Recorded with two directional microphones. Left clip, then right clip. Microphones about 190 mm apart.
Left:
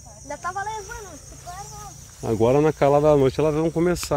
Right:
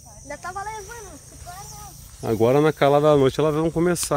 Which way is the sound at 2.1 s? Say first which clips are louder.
Right 1 dB; 10° right (ahead or behind).